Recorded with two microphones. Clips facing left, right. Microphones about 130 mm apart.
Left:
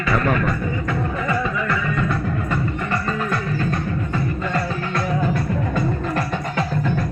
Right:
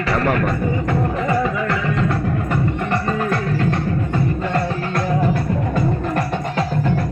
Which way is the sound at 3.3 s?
65° right (ahead or behind).